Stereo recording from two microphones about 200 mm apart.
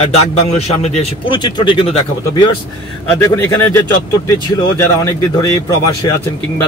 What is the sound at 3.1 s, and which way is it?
A man's voice, 15° left (ahead or behind).